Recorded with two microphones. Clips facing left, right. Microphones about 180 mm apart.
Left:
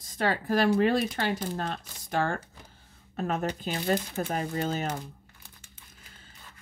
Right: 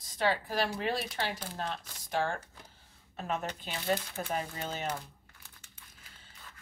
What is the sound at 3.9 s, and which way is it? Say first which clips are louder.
Speech: left 3 dB; 15° left (ahead or behind).